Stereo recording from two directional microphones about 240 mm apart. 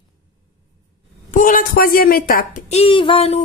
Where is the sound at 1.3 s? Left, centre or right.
Left.